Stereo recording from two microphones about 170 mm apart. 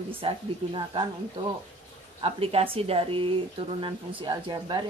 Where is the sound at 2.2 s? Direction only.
35° right (ahead or behind).